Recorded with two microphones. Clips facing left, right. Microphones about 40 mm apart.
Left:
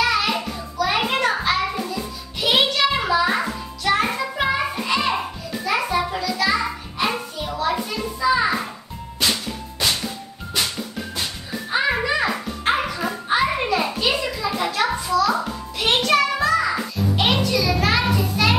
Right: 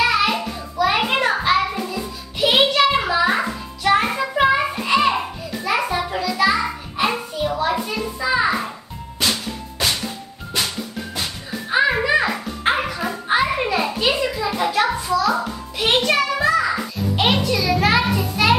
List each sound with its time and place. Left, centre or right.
0.0 s music: centre
2.7 s music: centre
11.7 s music: centre
17.2 s a sound: centre